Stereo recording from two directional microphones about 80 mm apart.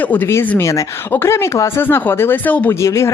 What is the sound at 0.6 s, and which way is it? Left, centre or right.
Speech, left.